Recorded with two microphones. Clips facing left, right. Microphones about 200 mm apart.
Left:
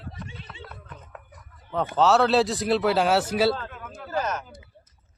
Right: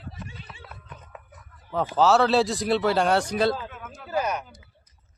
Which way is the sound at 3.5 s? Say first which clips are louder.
Even; 5° right (ahead or behind).